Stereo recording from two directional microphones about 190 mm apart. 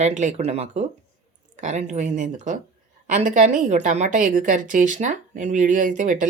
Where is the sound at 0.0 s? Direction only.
40° right (ahead or behind).